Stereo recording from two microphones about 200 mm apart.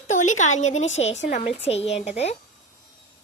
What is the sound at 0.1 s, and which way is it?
A woman's voice, 35° left (ahead or behind).